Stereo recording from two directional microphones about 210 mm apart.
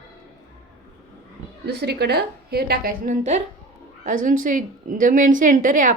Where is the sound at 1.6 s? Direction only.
50° right (ahead or behind).